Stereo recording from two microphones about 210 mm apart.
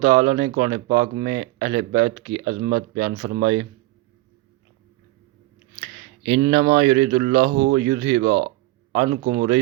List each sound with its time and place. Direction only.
0.2 s speech: 35° right (ahead or behind)
6.5 s speech: 45° right (ahead or behind)
6.8 s speech: 35° right (ahead or behind)
7.8 s speech: 35° right (ahead or behind)